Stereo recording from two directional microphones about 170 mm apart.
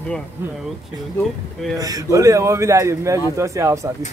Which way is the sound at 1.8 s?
20° right (ahead or behind).